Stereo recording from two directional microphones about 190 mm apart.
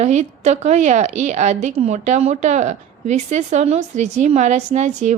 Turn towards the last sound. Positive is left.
turn(degrees=-40)  # may be behind; listen again after turning